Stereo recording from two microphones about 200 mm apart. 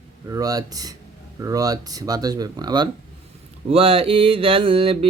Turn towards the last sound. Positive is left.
turn(degrees=-30)  # may be behind; listen again after turning